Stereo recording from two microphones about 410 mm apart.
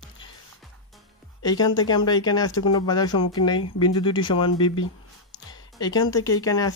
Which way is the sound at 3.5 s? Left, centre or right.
Left.